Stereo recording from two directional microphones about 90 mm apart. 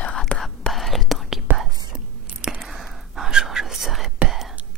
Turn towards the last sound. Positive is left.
turn(degrees=-5)  # may be behind; listen again after turning